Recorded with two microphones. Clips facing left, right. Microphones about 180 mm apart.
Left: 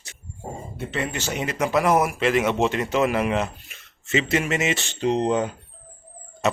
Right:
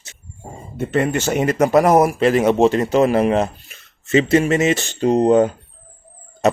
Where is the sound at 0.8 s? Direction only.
50° right (ahead or behind).